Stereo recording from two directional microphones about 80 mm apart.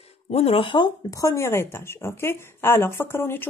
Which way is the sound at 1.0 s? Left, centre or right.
Left.